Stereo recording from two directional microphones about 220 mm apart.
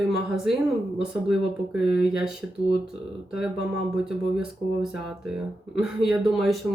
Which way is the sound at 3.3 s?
5° right (ahead or behind).